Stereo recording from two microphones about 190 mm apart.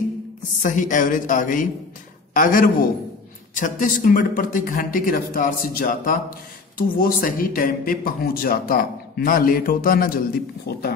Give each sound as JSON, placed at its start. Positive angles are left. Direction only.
{"t": 0.6, "sound": "speech", "side_deg": 40}